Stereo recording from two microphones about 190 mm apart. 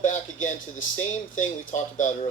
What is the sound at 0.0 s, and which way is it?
Speech, 45° left (ahead or behind).